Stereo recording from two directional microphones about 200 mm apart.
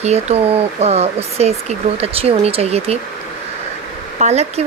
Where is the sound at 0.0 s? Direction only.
30° right (ahead or behind).